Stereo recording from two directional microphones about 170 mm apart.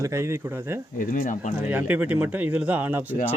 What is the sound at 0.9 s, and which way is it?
Speech, 50° left (ahead or behind).